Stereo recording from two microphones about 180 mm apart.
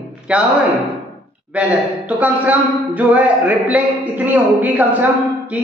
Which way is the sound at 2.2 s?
10° right (ahead or behind).